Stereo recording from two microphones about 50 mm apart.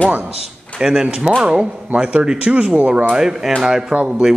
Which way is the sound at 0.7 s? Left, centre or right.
Centre.